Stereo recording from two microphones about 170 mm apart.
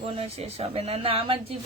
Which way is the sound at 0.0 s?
35° right (ahead or behind).